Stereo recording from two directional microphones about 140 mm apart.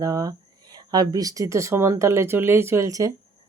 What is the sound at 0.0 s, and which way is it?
Speech, 25° right (ahead or behind).